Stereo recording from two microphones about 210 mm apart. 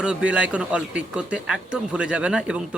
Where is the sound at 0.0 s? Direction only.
5° right (ahead or behind).